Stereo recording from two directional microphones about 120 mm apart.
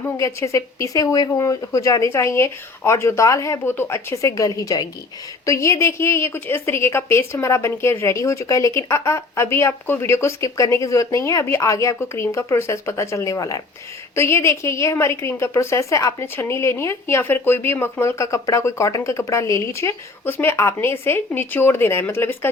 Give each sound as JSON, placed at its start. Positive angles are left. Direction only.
{"t": 0.2, "sound": "a woman's voice", "side_deg": 25}